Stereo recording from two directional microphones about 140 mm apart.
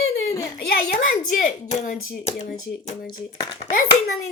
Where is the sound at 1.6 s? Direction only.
55° left (ahead or behind).